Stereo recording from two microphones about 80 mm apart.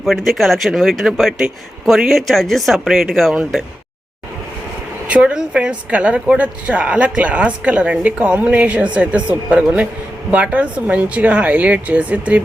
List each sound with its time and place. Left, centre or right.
0.0 s speech: centre
5.0 s a woman's voice: centre